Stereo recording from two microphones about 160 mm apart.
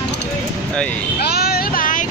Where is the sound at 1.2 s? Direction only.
75° left (ahead or behind); by 2.0 s 60° left (ahead or behind).